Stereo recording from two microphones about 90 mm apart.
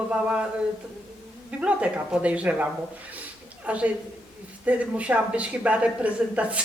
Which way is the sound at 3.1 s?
15° right (ahead or behind).